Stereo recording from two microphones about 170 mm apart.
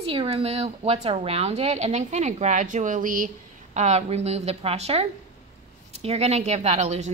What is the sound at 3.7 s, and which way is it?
A woman's voice, 40° right (ahead or behind).